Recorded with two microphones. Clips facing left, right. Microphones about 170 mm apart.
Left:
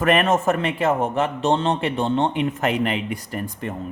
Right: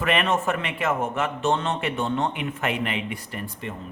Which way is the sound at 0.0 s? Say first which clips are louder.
Left 5 dB; 45° left (ahead or behind).